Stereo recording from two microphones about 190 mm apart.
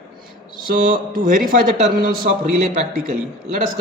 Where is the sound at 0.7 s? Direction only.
50° right (ahead or behind).